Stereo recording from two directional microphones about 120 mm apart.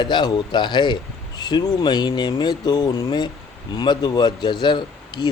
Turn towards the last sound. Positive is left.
turn(degrees=35)  # may be behind; listen again after turning